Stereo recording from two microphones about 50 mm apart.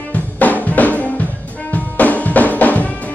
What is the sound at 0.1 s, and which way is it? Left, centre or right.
Drum kit, left.